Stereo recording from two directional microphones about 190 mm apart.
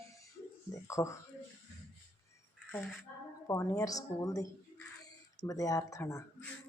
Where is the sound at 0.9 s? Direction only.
15° left (ahead or behind).